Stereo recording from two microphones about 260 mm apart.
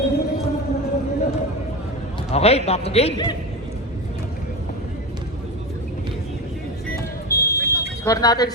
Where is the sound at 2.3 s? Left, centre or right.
Left.